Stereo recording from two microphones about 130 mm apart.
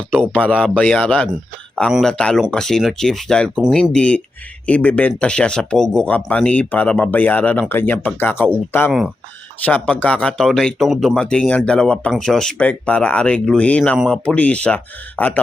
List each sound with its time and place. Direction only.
0.2 s speech: 10° left (ahead or behind)